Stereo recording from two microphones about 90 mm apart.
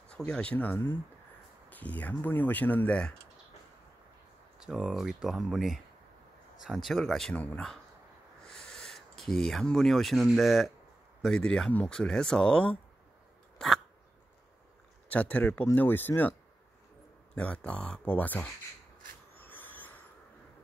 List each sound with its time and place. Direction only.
0.2 s speech: 15° left (ahead or behind)
4.6 s speech: 10° right (ahead or behind)
7.3 s speech: 15° left (ahead or behind)
13.6 s a sound: 5° left (ahead or behind)
15.0 s speech: 15° left (ahead or behind)
17.4 s speech: 10° left (ahead or behind)
19.3 s a sound: 20° left (ahead or behind)